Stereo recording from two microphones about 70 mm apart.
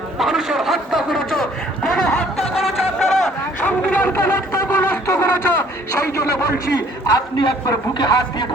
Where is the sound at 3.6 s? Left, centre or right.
Centre.